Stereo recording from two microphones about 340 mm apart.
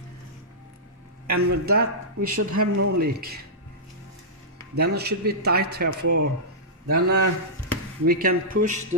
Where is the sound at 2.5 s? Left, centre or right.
Right.